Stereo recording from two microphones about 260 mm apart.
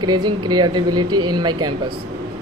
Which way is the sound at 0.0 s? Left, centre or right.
Centre.